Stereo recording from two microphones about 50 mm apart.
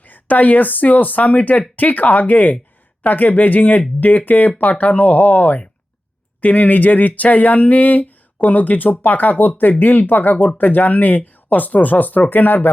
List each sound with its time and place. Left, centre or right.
0.1 s speech: left